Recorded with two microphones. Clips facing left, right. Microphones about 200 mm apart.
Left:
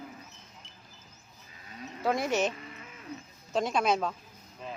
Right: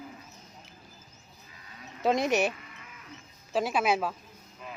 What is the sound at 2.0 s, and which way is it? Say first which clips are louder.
Speech: right 3 dB; 20° right (ahead or behind).